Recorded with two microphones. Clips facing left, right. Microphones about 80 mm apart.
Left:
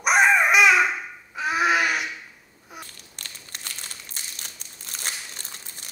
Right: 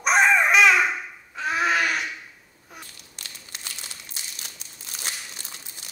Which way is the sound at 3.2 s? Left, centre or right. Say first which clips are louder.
Left 1 dB; left.